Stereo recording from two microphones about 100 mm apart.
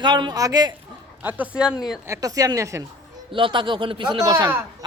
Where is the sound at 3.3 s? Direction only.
60° right (ahead or behind).